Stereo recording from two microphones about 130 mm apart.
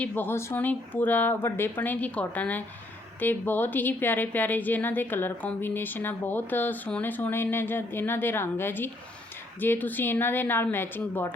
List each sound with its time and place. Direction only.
0.0 s speech: 15° left (ahead or behind)